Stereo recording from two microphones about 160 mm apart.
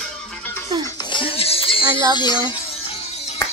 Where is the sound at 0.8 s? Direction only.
25° left (ahead or behind).